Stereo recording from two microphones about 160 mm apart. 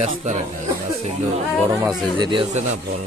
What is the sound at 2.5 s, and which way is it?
Speech, 45° right (ahead or behind).